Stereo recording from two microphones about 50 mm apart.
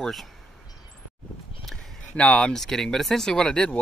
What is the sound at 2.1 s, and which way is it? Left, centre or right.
Speech, left.